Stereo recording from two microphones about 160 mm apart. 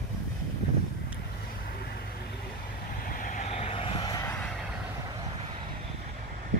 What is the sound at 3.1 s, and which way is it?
Vehicle, 55° left (ahead or behind).